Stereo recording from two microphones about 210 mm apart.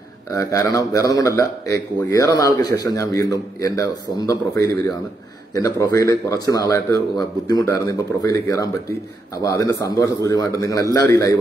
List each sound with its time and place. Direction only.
0.3 s a man's voice: 15° left (ahead or behind)